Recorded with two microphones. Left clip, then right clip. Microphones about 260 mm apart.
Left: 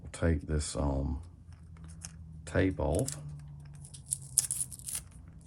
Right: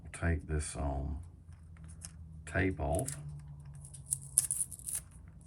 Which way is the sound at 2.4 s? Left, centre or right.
Centre.